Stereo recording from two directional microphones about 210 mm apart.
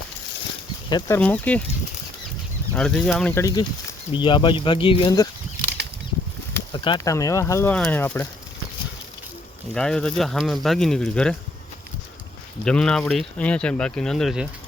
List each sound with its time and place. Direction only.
0.9 s speech: 20° left (ahead or behind)
2.7 s speech: 5° left (ahead or behind); by 5.3 s 20° left (ahead or behind)
6.7 s speech: 20° left (ahead or behind)
9.7 s speech: 5° left (ahead or behind)
12.6 s speech: 5° left (ahead or behind)